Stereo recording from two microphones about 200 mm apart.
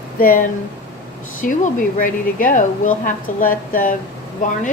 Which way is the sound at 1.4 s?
40° left (ahead or behind).